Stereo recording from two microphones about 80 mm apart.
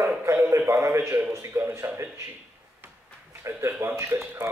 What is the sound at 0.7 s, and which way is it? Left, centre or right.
Speech, right.